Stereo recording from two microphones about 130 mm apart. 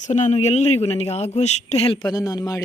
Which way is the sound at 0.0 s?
65° left (ahead or behind).